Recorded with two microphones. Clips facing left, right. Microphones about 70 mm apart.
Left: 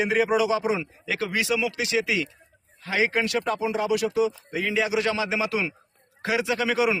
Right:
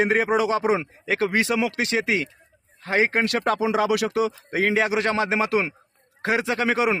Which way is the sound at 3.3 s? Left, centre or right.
Right.